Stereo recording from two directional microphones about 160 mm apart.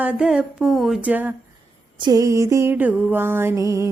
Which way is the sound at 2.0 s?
20° right (ahead or behind).